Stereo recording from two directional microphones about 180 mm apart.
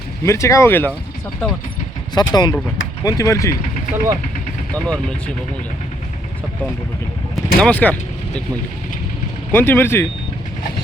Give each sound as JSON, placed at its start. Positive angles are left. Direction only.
{"t": 0.3, "sound": "speech", "side_deg": 15}
{"t": 2.1, "sound": "speech", "side_deg": 25}
{"t": 3.9, "sound": "speech", "side_deg": -15}
{"t": 7.3, "sound": "speech", "side_deg": 5}
{"t": 9.5, "sound": "speech", "side_deg": 10}